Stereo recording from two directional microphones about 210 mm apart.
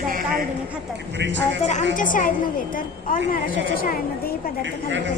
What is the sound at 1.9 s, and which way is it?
Speech, 40° left (ahead or behind).